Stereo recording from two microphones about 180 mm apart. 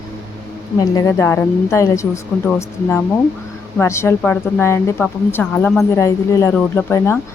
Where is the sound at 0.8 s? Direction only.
20° left (ahead or behind).